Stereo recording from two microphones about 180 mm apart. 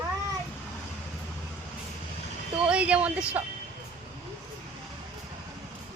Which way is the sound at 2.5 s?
5° right (ahead or behind).